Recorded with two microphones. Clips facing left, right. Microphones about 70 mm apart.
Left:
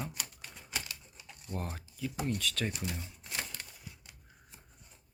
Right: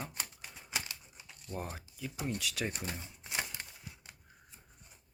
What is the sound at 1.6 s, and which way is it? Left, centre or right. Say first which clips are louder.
Speech: left 2 dB; centre.